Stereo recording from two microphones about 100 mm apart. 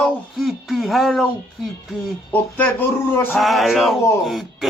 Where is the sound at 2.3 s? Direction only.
15° left (ahead or behind).